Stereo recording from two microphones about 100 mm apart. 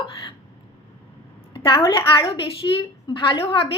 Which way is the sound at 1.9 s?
55° left (ahead or behind).